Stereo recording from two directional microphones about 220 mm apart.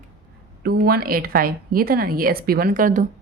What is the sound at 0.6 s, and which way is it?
A woman's voice, 45° right (ahead or behind).